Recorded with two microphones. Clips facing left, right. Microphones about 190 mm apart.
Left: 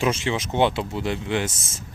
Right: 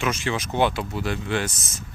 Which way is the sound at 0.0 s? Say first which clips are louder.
Left 2 dB; 25° left (ahead or behind).